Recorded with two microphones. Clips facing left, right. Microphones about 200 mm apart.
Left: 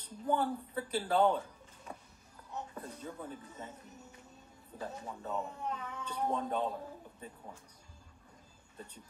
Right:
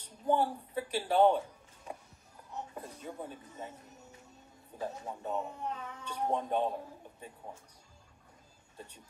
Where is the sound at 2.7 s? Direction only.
20° right (ahead or behind).